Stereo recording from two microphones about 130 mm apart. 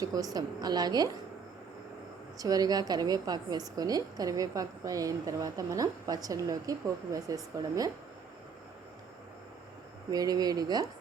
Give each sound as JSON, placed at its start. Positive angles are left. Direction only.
{"t": 0.0, "sound": "a woman's voice", "side_deg": -30}
{"t": 2.4, "sound": "a woman's voice", "side_deg": -30}
{"t": 10.1, "sound": "a woman's voice", "side_deg": -30}